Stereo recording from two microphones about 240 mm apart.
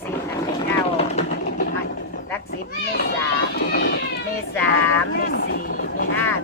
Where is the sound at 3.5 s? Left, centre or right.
Left.